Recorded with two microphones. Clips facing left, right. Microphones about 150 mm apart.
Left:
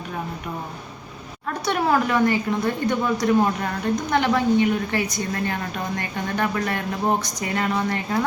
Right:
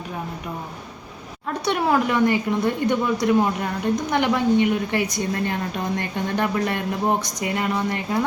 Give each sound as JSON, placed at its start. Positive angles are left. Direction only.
{"t": 1.6, "sound": "speech", "side_deg": -20}